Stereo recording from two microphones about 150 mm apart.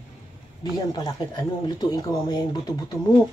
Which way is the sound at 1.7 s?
30° left (ahead or behind).